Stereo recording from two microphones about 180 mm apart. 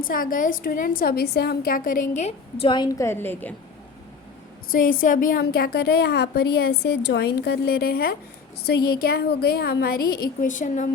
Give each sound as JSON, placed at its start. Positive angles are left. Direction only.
{"t": 0.1, "sound": "a woman's voice", "side_deg": 50}
{"t": 4.7, "sound": "a woman's voice", "side_deg": 50}